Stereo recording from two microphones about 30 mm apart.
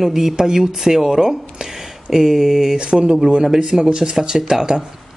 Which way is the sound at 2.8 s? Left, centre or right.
Right.